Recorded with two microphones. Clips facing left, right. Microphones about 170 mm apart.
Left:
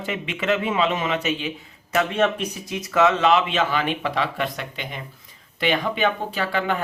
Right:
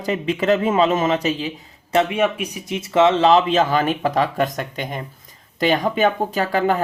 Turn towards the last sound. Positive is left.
turn(degrees=-40)  # may be behind; listen again after turning